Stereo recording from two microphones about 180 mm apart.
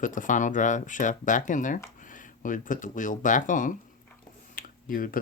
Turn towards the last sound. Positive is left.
turn(degrees=50)  # may be behind; listen again after turning